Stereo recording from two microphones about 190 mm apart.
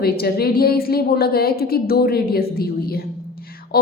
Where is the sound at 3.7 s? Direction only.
55° left (ahead or behind).